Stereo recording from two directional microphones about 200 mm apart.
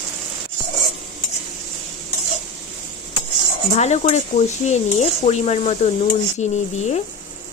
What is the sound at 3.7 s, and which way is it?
Speech, 35° left (ahead or behind).